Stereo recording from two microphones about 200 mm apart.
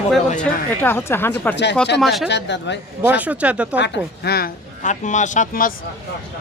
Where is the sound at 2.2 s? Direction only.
60° left (ahead or behind).